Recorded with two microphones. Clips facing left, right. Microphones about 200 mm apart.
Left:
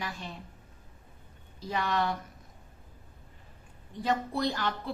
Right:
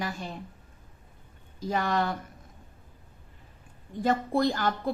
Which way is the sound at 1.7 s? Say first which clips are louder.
Right 3 dB; 45° right (ahead or behind).